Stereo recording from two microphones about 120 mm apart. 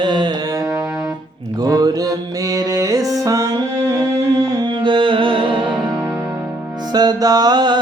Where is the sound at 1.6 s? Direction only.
30° right (ahead or behind).